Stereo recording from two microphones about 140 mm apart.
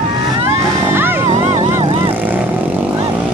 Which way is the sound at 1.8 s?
40° right (ahead or behind).